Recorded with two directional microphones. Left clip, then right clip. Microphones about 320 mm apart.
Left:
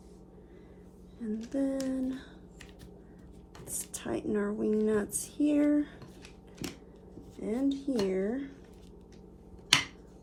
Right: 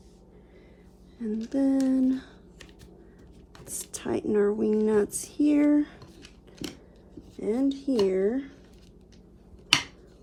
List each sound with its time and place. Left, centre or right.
1.2 s speech: right
3.9 s speech: right
7.4 s speech: right